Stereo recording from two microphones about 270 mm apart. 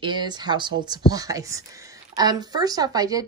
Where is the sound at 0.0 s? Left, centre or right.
Centre.